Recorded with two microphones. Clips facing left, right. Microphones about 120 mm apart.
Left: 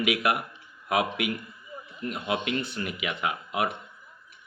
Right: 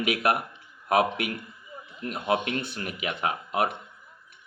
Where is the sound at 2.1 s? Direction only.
50° right (ahead or behind).